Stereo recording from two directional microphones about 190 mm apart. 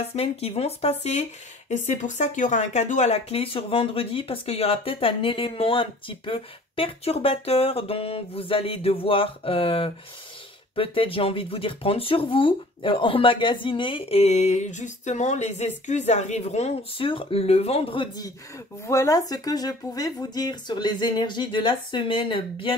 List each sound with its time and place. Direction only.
0.0 s speech: 30° left (ahead or behind)